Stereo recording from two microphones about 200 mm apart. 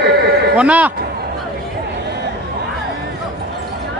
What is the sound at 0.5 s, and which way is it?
Speech, 5° right (ahead or behind).